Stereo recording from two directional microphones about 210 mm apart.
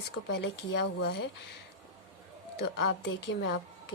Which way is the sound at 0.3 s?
55° left (ahead or behind).